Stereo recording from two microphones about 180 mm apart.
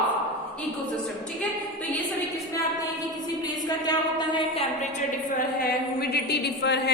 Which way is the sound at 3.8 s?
25° left (ahead or behind).